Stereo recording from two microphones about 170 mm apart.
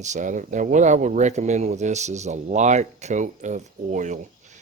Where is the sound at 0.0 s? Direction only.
45° right (ahead or behind).